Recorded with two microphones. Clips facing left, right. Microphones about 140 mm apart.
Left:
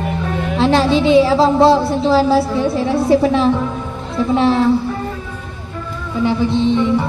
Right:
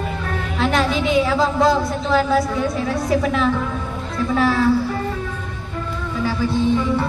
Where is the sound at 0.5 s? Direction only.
30° left (ahead or behind).